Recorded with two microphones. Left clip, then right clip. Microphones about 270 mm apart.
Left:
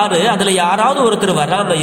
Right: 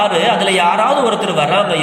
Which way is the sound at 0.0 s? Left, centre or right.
Left.